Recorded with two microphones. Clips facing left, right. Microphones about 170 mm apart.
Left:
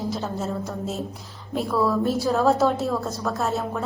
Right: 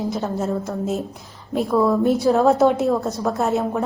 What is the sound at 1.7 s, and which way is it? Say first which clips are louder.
A woman's voice: right 5 dB; 20° right (ahead or behind).